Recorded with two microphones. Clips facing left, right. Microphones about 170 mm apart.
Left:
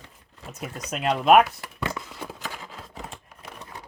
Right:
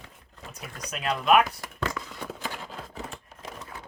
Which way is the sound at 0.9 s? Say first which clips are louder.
Left 4 dB; 40° left (ahead or behind).